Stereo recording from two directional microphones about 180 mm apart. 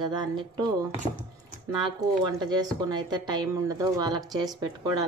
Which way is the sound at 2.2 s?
25° right (ahead or behind).